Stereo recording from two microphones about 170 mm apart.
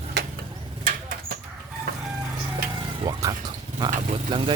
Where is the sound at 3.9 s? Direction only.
40° right (ahead or behind).